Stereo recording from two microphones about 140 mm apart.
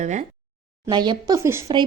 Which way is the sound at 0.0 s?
60° right (ahead or behind).